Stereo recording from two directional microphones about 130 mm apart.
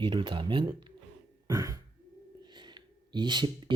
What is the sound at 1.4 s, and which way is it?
Speech, 25° right (ahead or behind).